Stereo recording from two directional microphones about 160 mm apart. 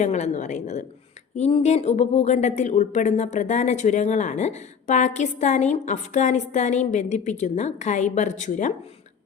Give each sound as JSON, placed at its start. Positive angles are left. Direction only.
{"t": 0.0, "sound": "a woman's voice", "side_deg": 45}